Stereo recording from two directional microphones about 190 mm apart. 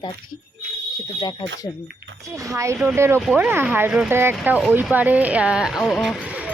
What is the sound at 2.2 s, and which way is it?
Speech, 15° right (ahead or behind).